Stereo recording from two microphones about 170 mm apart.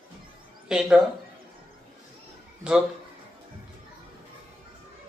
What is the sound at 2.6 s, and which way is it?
Speech, 5° right (ahead or behind).